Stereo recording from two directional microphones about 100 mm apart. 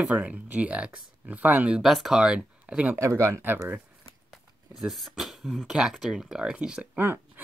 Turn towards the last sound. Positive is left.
turn(degrees=-20)  # may be behind; listen again after turning